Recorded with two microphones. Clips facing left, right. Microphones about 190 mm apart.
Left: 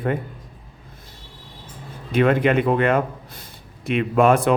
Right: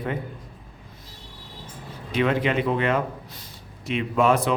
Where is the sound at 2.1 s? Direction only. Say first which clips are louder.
Left 5 dB; 50° left (ahead or behind).